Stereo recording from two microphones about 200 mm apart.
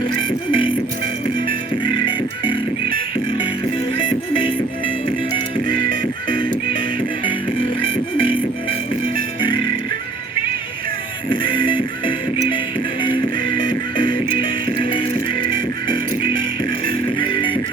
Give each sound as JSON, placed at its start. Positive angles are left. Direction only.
{"t": 0.3, "sound": "music", "side_deg": 25}
{"t": 7.9, "sound": "music", "side_deg": 25}
{"t": 11.3, "sound": "music", "side_deg": 25}
{"t": 15.9, "sound": "music", "side_deg": 25}